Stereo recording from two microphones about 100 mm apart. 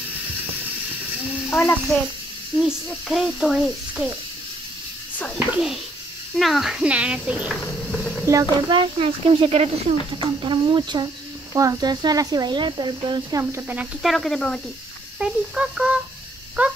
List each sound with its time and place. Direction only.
1.5 s a child's voice: 25° left (ahead or behind)
2.5 s a child's voice: centre (ahead or behind)
5.5 s a child's voice: 5° right (ahead or behind)
7.9 s a sound: 5° left (ahead or behind)
8.6 s speech: 60° right (ahead or behind); by 9.7 s 80° right
10.1 s speech: 55° right (ahead or behind)
11.5 s speech: 35° right (ahead or behind)
13.4 s speech: 25° right (ahead or behind)
14.0 s a child's voice: centre (ahead or behind)
15.1 s speech: 10° right (ahead or behind)